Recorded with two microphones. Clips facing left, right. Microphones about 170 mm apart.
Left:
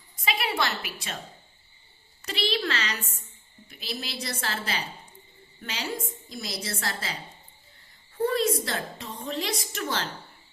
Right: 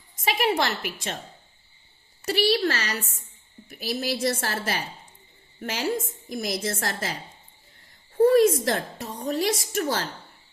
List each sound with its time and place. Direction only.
0.2 s a woman's voice: 45° right (ahead or behind)
2.2 s a woman's voice: 40° right (ahead or behind)